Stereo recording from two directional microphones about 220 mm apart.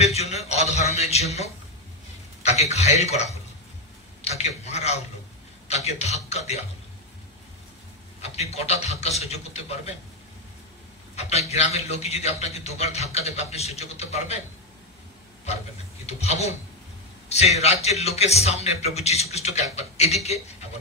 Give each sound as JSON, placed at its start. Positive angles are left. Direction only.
{"t": 0.0, "sound": "a sound", "side_deg": 30}
{"t": 2.4, "sound": "speech", "side_deg": 30}
{"t": 4.2, "sound": "a sound", "side_deg": 30}
{"t": 5.7, "sound": "a man's voice", "side_deg": 30}
{"t": 8.2, "sound": "a man's voice", "side_deg": 30}
{"t": 11.1, "sound": "a man's voice", "side_deg": 30}
{"t": 16.1, "sound": "a man's voice", "side_deg": 30}